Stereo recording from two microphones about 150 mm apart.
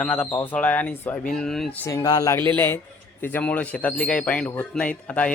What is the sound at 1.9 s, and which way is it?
A man's voice, 25° left (ahead or behind).